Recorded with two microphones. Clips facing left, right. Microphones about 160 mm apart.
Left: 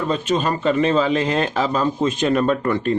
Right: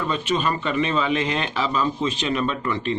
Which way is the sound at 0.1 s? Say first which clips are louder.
Left 3 dB; 40° left (ahead or behind).